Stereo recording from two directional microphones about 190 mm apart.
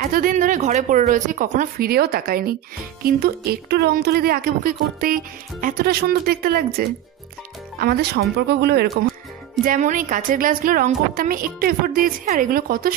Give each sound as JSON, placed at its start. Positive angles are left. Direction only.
{"t": 0.1, "sound": "speech", "side_deg": -45}
{"t": 9.7, "sound": "speech", "side_deg": -45}